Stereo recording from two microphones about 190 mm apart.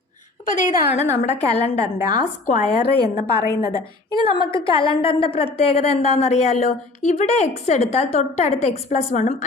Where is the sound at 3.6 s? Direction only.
50° left (ahead or behind).